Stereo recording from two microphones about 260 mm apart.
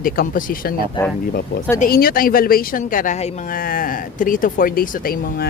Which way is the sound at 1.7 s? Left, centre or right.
Left.